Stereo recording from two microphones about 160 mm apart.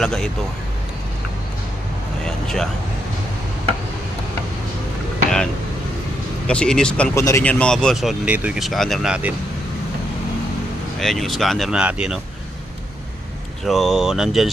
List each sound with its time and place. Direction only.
0.0 s speech: centre (ahead or behind)
2.2 s vehicle: 5° left (ahead or behind)
6.5 s speech: 5° left (ahead or behind)
7.6 s speech: 5° left (ahead or behind)
8.2 s speech: 5° right (ahead or behind)
11.0 s speech: centre (ahead or behind)
13.7 s speech: centre (ahead or behind)